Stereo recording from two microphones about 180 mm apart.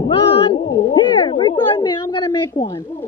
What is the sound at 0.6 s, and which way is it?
Speech, 25° left (ahead or behind).